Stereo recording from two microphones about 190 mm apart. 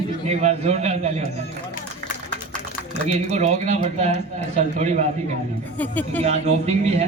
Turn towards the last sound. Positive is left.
turn(degrees=-35)  # may be behind; listen again after turning